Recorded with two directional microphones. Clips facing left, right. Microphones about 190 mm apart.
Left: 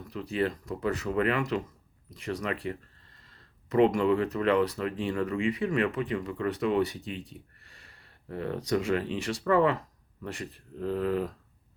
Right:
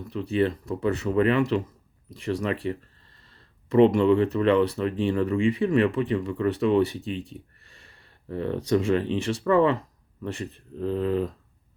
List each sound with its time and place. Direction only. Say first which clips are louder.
0.1 s speech: right 5 dB; 25° right (ahead or behind)